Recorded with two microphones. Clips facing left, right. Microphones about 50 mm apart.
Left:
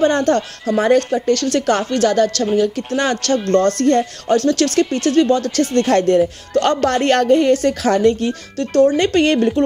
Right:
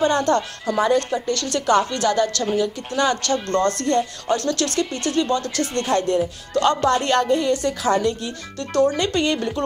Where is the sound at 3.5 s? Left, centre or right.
Centre.